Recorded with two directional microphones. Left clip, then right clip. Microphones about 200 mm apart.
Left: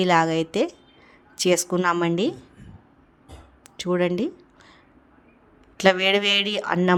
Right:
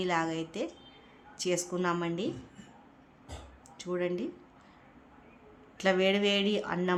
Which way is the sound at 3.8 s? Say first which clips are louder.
Left 10 dB; 45° left (ahead or behind).